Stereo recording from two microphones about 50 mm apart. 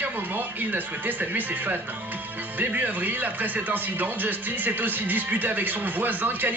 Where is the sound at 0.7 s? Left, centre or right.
Right.